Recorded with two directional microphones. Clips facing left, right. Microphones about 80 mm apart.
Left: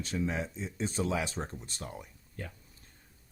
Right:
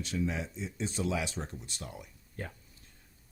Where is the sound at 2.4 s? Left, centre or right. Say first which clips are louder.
Right 2 dB; right.